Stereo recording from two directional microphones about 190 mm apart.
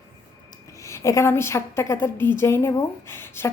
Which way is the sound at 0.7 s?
15° left (ahead or behind).